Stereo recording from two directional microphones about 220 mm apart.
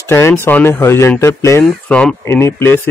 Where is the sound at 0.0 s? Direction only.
10° left (ahead or behind).